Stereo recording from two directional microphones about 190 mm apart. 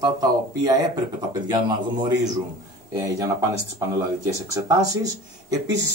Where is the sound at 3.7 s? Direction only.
15° right (ahead or behind).